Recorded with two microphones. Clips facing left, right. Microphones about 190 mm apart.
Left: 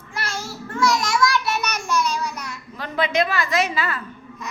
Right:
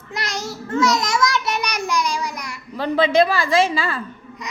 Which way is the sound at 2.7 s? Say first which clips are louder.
Right 6 dB; 30° right (ahead or behind).